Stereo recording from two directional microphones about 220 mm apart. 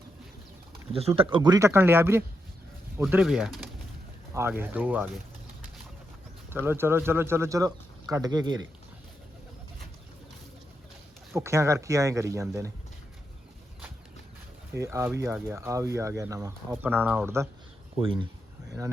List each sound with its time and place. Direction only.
0.9 s speech: 25° right (ahead or behind); by 5.2 s 5° right (ahead or behind)
6.7 s speech: 10° right (ahead or behind)
11.3 s speech: 15° right (ahead or behind)
14.7 s speech: 10° right (ahead or behind)
17.9 s speech: 20° right (ahead or behind)